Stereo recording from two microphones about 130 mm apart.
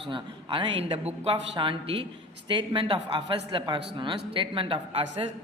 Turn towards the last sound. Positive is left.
turn(degrees=-45)  # may be behind; listen again after turning